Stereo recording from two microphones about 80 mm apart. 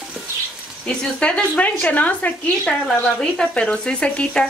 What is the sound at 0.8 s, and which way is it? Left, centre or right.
Speech, centre.